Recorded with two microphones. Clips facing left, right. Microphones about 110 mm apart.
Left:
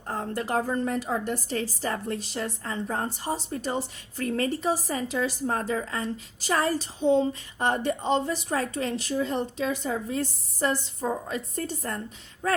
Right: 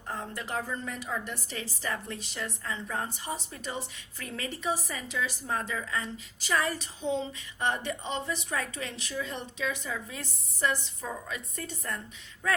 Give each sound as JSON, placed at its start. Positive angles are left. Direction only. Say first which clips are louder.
{"t": 0.1, "sound": "a woman's voice", "louder": "left 7 dB", "side_deg": 40}